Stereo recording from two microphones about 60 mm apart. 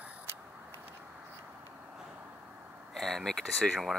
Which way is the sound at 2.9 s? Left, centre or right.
Centre.